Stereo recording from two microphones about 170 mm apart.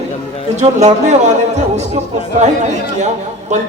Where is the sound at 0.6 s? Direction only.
45° right (ahead or behind).